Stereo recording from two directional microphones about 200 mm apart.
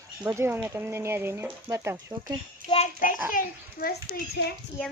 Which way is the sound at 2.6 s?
45° right (ahead or behind).